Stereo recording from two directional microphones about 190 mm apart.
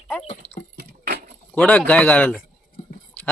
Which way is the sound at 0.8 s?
55° right (ahead or behind).